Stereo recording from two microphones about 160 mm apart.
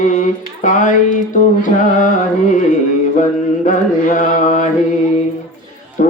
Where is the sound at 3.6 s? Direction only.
55° left (ahead or behind).